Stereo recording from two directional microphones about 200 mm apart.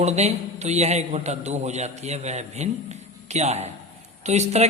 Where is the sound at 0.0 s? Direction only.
35° right (ahead or behind).